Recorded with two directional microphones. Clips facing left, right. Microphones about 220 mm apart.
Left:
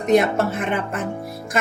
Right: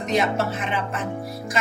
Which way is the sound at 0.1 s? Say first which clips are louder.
Left 6 dB; 50° left (ahead or behind).